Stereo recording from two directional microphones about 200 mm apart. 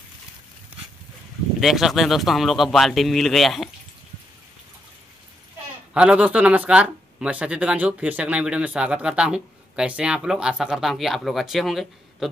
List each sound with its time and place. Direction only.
1.6 s speech: centre (ahead or behind)
5.9 s speech: 5° right (ahead or behind)